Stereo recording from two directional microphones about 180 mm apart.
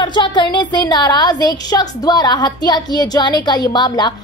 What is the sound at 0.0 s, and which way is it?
Speech, 25° left (ahead or behind).